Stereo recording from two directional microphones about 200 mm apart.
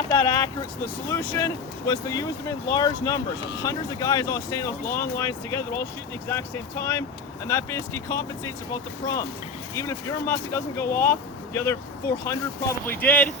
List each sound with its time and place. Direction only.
0.1 s speech: 15° left (ahead or behind)
12.8 s speech: 10° left (ahead or behind)